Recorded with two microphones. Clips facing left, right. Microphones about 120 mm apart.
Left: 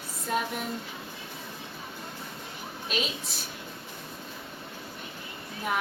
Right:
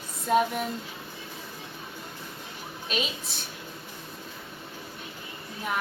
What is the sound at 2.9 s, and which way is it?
Speech, centre (ahead or behind).